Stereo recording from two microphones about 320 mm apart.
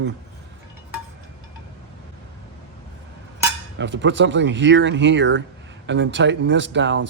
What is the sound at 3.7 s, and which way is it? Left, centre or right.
Speech, right.